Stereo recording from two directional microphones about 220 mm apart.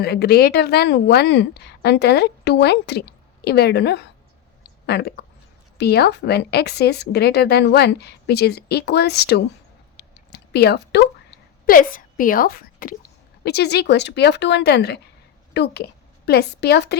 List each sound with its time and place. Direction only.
0.0 s speech: 45° left (ahead or behind)
10.0 s a sound: 50° left (ahead or behind)
11.6 s a woman's voice: 40° left (ahead or behind)